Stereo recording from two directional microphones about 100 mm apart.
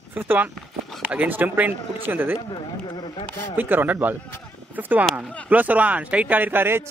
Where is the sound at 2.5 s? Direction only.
50° left (ahead or behind).